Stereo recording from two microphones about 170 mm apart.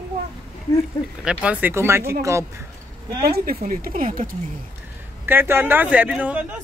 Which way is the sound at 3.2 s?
60° right (ahead or behind).